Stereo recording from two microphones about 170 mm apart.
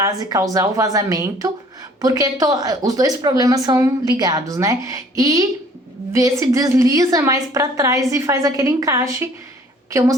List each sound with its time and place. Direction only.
0.0 s speech: 20° right (ahead or behind)